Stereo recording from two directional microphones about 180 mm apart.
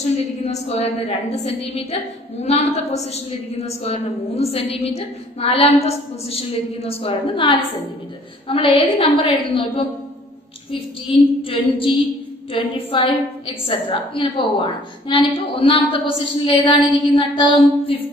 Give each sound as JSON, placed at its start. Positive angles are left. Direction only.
{"t": 0.0, "sound": "a woman's voice", "side_deg": 40}